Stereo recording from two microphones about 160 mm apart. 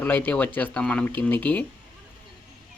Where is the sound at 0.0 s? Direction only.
10° left (ahead or behind).